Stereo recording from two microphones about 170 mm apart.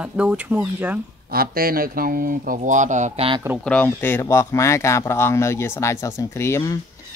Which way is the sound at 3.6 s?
10° left (ahead or behind).